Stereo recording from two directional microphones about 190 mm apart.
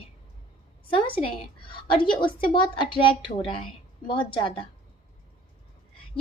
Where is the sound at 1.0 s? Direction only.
25° left (ahead or behind).